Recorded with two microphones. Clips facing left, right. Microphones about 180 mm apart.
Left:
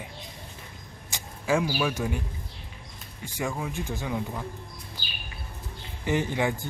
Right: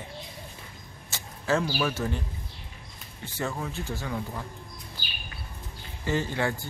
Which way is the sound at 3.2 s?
10° left (ahead or behind).